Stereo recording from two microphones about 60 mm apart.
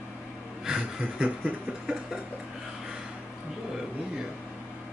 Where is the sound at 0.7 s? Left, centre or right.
Centre.